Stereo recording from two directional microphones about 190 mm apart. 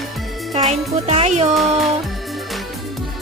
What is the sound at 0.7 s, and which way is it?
Music, 30° right (ahead or behind).